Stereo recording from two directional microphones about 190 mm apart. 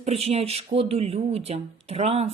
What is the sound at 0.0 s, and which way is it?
Speech, 35° right (ahead or behind).